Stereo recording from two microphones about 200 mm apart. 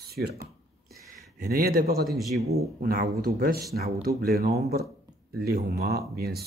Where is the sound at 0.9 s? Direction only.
50° right (ahead or behind).